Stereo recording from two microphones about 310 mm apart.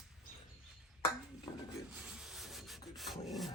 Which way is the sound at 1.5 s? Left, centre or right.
Centre.